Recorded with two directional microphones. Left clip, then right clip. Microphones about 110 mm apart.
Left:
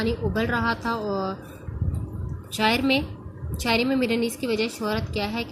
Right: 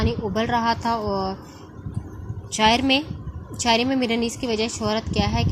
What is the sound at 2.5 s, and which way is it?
A woman's voice, 30° right (ahead or behind).